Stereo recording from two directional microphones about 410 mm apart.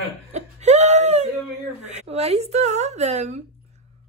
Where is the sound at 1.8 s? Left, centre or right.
Centre.